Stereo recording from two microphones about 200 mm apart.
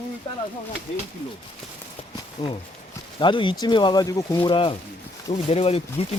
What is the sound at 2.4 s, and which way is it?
Speech, 30° left (ahead or behind).